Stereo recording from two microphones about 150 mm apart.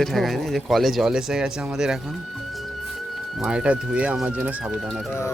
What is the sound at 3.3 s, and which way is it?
Speech, 5° right (ahead or behind).